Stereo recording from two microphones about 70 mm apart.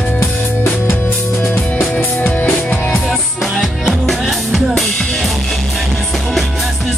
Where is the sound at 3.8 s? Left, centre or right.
Centre.